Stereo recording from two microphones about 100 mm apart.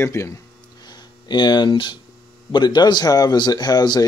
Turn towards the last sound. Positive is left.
turn(degrees=45)  # may be behind; listen again after turning